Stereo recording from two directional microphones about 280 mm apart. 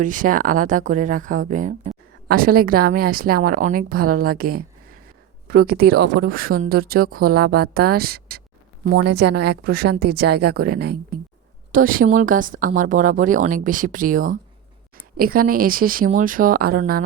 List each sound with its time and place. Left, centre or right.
0.0 s speech: right